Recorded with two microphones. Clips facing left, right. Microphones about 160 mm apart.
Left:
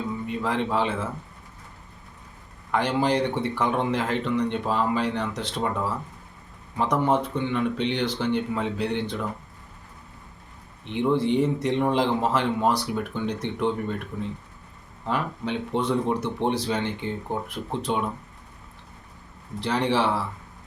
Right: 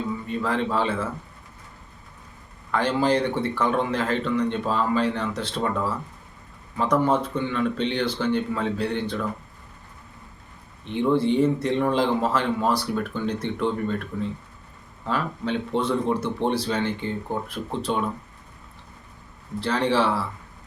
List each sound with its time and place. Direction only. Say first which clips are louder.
0.3 s speech: right 1 dB; 15° left (ahead or behind)
2.7 s speech: right 1 dB; 15° left (ahead or behind)
10.8 s speech: right 2 dB; 15° left (ahead or behind)
19.5 s speech: right 1 dB; 15° left (ahead or behind)